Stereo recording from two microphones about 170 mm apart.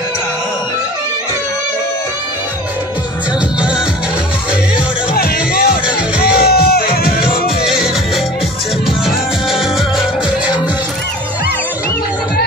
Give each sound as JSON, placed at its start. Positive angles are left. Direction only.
{"t": 5.1, "sound": "music", "side_deg": 60}
{"t": 7.6, "sound": "music", "side_deg": -5}
{"t": 9.0, "sound": "music", "side_deg": 0}